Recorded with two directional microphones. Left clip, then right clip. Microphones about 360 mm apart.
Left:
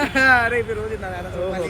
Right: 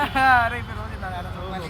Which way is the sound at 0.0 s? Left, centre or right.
Centre.